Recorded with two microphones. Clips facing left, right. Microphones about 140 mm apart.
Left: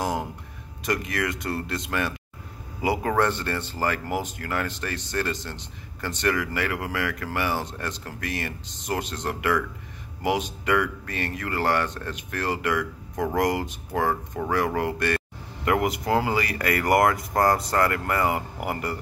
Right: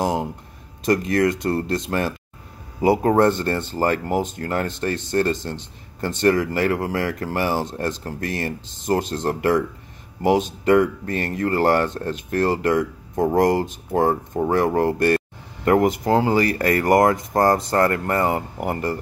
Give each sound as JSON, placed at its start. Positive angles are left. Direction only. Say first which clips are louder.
{"t": 0.0, "sound": "a sound", "louder": "right 5 dB", "side_deg": -25}
{"t": 0.8, "sound": "speech", "louder": "right 9 dB", "side_deg": -30}
{"t": 13.4, "sound": "speech", "louder": "right 5 dB", "side_deg": -35}
{"t": 16.0, "sound": "speech", "louder": "right 5 dB", "side_deg": -25}
{"t": 16.3, "sound": "speech", "louder": "right 6 dB", "side_deg": -35}